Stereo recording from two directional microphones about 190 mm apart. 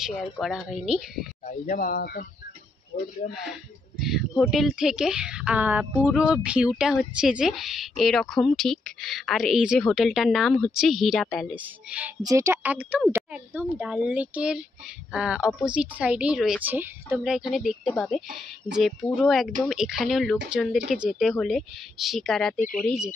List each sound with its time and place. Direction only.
0.0 s a woman's voice: centre (ahead or behind)
1.4 s speech: 45° left (ahead or behind)
4.0 s a woman's voice: centre (ahead or behind)